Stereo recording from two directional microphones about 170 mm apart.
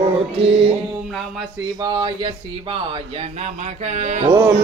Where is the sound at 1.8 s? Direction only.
25° right (ahead or behind); by 4.3 s 45° right (ahead or behind).